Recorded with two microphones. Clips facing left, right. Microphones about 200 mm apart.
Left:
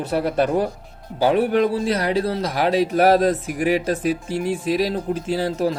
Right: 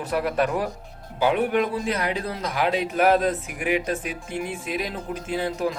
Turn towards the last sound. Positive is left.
turn(degrees=35)  # may be behind; listen again after turning